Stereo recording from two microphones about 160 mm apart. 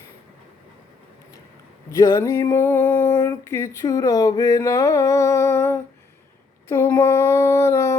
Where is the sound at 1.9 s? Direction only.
20° left (ahead or behind).